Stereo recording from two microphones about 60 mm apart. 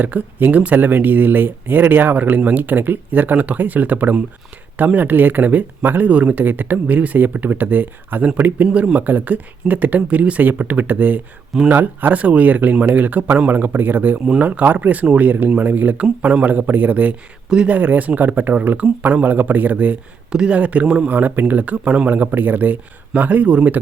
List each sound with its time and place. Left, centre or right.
0.0 s speech: right